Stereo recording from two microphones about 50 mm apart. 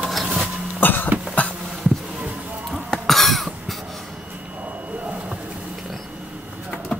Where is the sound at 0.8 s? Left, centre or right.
Left.